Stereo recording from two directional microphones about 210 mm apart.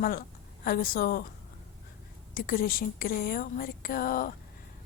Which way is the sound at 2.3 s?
45° left (ahead or behind).